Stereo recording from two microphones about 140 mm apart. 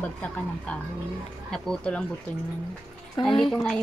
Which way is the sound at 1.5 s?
5° left (ahead or behind).